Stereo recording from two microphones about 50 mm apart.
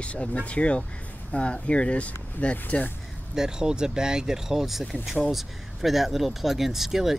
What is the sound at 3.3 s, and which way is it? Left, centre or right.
Speech, centre.